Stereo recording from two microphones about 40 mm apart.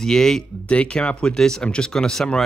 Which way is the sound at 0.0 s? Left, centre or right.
Centre.